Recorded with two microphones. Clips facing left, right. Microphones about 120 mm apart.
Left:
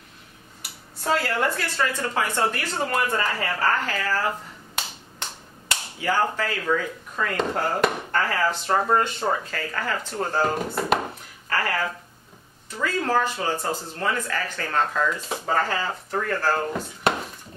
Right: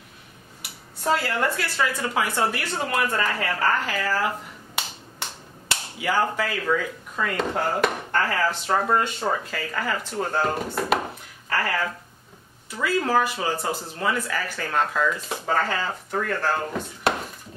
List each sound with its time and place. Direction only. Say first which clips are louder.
1.0 s speech: even; centre (ahead or behind)
5.9 s speech: even; 10° right (ahead or behind)
11.4 s a sound: even; 5° right (ahead or behind)
12.7 s speech: right 1 dB; 10° right (ahead or behind)